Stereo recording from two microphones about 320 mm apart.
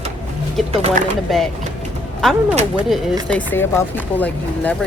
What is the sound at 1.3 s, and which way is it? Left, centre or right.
Speech, centre.